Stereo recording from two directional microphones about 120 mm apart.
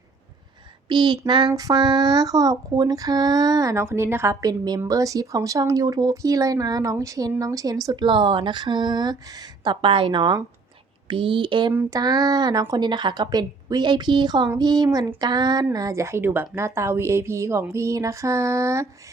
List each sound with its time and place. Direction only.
0.9 s speech: 40° right (ahead or behind); by 18.9 s 25° right (ahead or behind)